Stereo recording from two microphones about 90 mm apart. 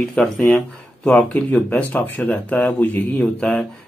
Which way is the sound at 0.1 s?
15° left (ahead or behind).